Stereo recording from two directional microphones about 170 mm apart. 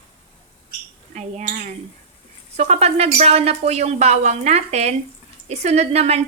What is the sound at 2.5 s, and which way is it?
A woman's voice, 40° right (ahead or behind).